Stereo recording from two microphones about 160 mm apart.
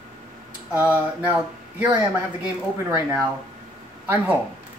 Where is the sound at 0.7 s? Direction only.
5° right (ahead or behind).